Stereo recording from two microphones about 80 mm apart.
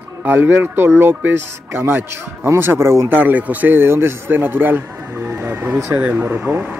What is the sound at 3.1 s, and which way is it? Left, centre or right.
Speech, right.